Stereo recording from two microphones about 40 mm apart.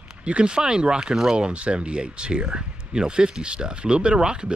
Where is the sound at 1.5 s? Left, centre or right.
Right.